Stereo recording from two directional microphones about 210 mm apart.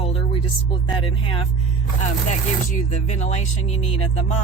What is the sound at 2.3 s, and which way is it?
Speech, 35° left (ahead or behind).